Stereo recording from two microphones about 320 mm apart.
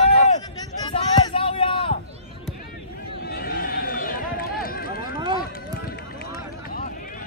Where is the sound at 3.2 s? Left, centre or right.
Left.